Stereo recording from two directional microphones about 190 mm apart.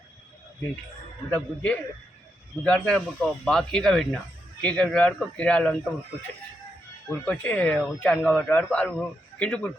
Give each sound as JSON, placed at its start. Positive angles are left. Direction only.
{"t": 1.3, "sound": "speech", "side_deg": 5}
{"t": 7.1, "sound": "speech", "side_deg": 10}